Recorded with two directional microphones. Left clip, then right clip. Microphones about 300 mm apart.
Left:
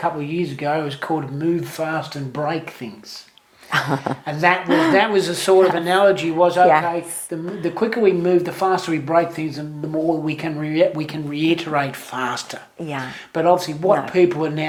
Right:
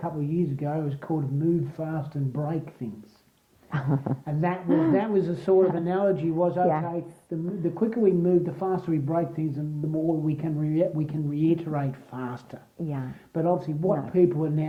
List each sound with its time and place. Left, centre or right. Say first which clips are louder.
0.0 s speech: left 8 dB; centre
9.6 s speech: left 7 dB; centre
10.2 s speech: left 5 dB; centre